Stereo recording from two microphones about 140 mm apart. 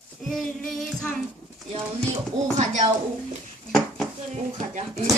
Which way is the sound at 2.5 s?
60° right (ahead or behind).